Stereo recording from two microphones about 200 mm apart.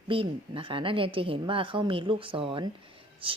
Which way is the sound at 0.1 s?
25° right (ahead or behind).